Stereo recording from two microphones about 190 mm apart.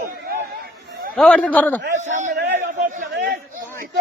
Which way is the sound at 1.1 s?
5° left (ahead or behind).